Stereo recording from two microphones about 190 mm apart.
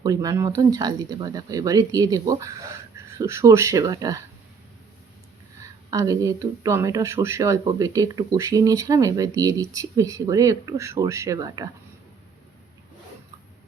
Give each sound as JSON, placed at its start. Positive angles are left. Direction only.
{"t": 0.0, "sound": "speech", "side_deg": -20}
{"t": 5.9, "sound": "speech", "side_deg": -15}